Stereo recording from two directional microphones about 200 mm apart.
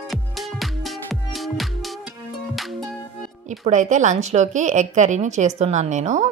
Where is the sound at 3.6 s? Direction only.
40° right (ahead or behind).